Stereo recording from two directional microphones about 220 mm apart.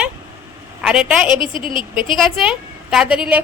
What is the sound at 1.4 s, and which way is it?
Speech, 40° right (ahead or behind).